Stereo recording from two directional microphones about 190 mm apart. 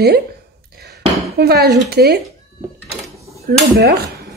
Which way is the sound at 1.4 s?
55° right (ahead or behind).